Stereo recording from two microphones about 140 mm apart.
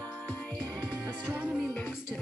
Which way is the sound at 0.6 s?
10° left (ahead or behind).